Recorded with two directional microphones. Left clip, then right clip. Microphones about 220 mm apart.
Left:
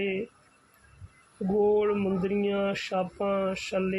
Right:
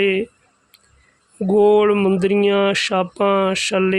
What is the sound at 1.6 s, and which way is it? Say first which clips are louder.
Speech: right 11 dB; 50° right (ahead or behind).